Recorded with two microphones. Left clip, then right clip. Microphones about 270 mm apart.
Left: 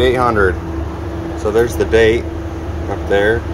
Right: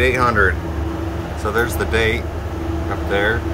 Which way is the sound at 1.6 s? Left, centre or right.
Right.